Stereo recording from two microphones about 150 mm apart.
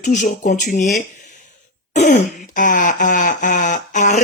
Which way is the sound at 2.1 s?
60° left (ahead or behind).